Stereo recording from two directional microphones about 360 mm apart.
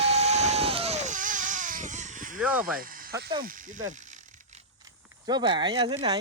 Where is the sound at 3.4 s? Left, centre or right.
Right.